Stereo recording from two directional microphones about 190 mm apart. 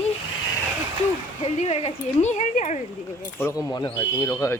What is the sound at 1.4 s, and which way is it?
Speech, 30° left (ahead or behind).